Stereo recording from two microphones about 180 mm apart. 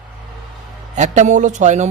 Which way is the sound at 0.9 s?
40° right (ahead or behind).